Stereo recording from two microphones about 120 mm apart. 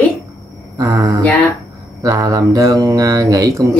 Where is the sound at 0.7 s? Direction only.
30° right (ahead or behind).